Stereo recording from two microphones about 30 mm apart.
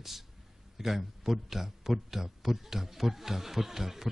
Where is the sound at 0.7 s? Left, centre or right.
Centre.